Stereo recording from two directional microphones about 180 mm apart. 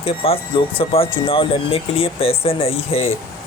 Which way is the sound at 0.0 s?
30° left (ahead or behind).